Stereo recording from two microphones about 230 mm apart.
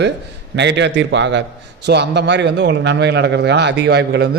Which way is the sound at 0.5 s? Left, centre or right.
Right.